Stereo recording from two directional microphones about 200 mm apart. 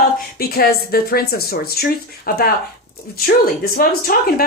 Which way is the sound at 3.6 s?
50° left (ahead or behind).